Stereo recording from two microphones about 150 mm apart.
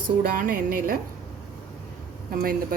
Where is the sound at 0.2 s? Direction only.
65° right (ahead or behind).